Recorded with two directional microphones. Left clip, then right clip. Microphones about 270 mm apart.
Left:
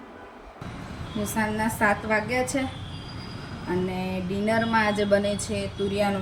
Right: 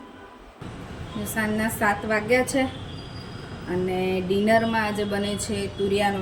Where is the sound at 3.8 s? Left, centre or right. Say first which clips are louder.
Right 6 dB; left.